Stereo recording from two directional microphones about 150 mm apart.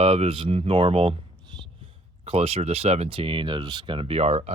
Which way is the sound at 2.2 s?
40° right (ahead or behind).